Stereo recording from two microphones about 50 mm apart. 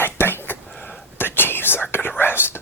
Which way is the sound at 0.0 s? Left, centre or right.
Left.